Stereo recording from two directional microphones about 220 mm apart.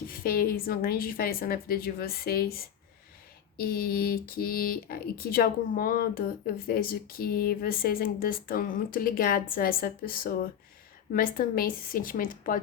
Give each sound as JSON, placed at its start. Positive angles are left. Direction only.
{"t": 0.1, "sound": "speech", "side_deg": 40}